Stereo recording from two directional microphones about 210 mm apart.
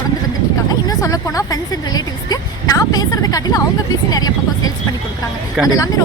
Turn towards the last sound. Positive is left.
turn(degrees=15)  # may be behind; listen again after turning